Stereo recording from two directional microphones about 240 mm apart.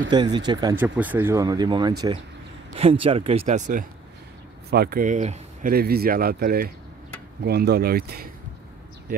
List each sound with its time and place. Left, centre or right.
0.1 s speech: centre
0.7 s speech: centre; by 8.3 s right